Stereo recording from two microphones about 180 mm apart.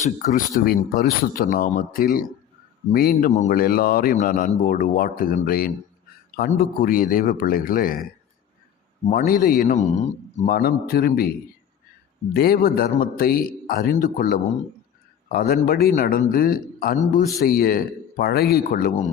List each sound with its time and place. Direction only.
0.0 s a man's voice: 45° left (ahead or behind)
9.0 s a man's voice: 50° left (ahead or behind)
10.5 s speech: 55° left (ahead or behind)
12.3 s a man's voice: 60° left (ahead or behind)